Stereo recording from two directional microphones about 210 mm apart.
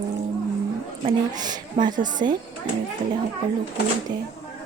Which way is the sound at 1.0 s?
20° right (ahead or behind).